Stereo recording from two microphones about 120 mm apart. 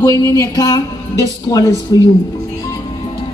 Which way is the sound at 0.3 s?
25° left (ahead or behind).